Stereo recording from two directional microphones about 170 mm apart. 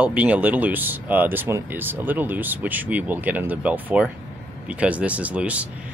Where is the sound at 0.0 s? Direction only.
10° right (ahead or behind).